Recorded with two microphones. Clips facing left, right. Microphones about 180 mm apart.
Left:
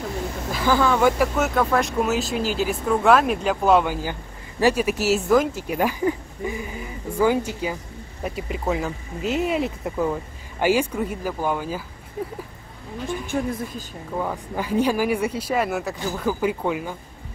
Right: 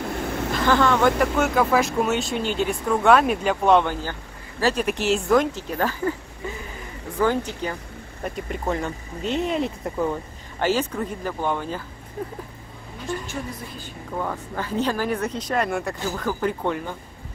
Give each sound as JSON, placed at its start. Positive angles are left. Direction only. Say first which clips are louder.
{"t": 0.5, "sound": "speech", "louder": "even", "side_deg": 5}
{"t": 13.3, "sound": "a woman's voice", "louder": "left 7 dB", "side_deg": 50}
{"t": 14.1, "sound": "speech", "louder": "left 2 dB", "side_deg": 10}